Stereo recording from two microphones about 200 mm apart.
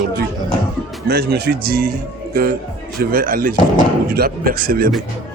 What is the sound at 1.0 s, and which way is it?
Speech, 50° right (ahead or behind).